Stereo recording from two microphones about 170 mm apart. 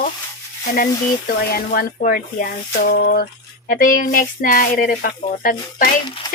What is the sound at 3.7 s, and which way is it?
Speech, 55° left (ahead or behind).